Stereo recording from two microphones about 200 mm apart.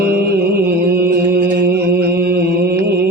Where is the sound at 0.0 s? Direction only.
55° right (ahead or behind).